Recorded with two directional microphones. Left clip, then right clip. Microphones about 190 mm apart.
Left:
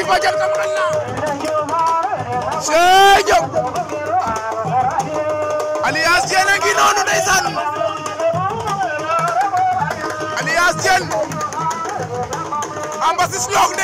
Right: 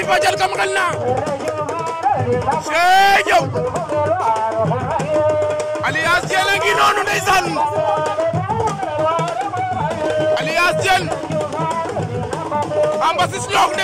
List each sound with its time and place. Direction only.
0.1 s speech: centre (ahead or behind)
2.7 s speech: 10° left (ahead or behind)
5.9 s speech: 5° left (ahead or behind)
10.5 s music: centre (ahead or behind)
13.0 s speech: centre (ahead or behind)